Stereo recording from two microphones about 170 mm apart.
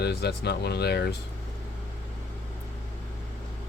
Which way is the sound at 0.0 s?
75° left (ahead or behind).